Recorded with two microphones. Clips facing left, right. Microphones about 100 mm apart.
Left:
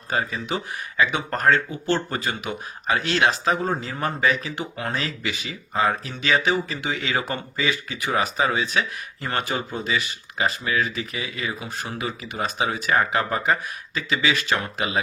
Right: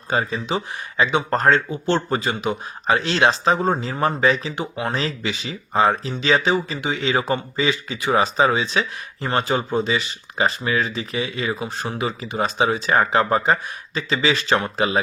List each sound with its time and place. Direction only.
0.1 s speech: 25° right (ahead or behind)